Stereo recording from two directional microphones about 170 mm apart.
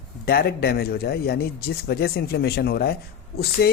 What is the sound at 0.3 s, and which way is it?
Speech, 65° left (ahead or behind).